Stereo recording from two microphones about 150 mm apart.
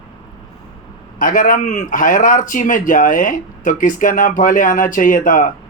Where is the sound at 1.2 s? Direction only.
65° left (ahead or behind).